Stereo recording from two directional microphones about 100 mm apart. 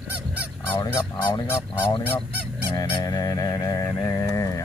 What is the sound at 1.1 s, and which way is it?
Speech, 45° left (ahead or behind).